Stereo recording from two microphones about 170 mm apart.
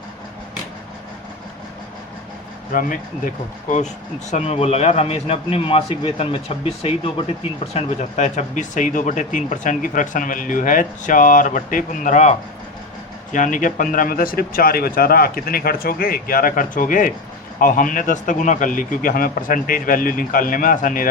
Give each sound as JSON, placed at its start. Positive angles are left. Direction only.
{"t": 4.3, "sound": "a man's voice", "side_deg": 40}